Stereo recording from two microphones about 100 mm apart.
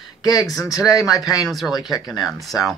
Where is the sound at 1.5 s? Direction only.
Centre (ahead or behind).